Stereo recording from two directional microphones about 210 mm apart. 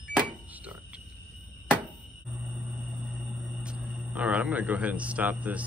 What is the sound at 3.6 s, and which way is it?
A man's voice, 5° right (ahead or behind).